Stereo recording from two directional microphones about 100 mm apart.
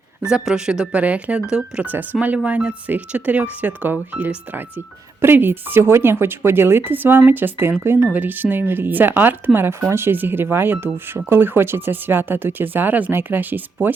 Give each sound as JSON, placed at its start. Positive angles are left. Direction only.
{"t": 0.3, "sound": "speech", "side_deg": -5}